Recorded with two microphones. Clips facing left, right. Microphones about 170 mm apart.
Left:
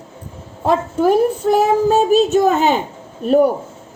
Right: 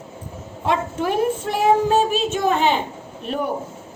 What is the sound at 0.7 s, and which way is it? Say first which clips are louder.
A woman's voice: left 7 dB; 40° left (ahead or behind).